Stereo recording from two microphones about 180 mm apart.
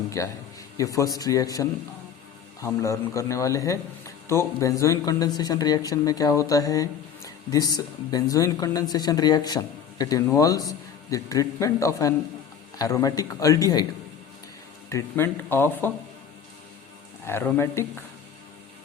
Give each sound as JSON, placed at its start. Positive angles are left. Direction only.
{"t": 0.2, "sound": "speech", "side_deg": 15}
{"t": 14.8, "sound": "speech", "side_deg": 15}
{"t": 17.2, "sound": "speech", "side_deg": 15}